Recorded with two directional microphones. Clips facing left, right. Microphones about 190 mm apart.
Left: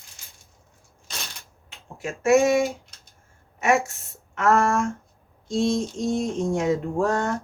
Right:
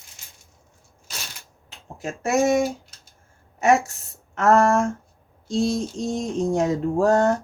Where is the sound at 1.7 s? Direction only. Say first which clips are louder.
Right 1 dB; 35° right (ahead or behind).